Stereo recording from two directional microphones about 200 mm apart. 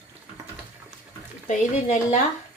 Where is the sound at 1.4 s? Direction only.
35° left (ahead or behind).